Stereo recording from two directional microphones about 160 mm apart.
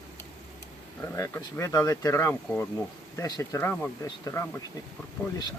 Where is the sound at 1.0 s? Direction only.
15° left (ahead or behind).